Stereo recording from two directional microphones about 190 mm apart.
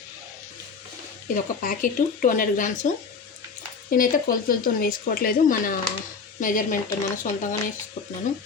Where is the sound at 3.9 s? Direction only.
45° left (ahead or behind).